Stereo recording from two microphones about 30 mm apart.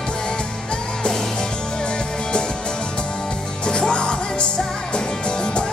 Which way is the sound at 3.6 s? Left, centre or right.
Left.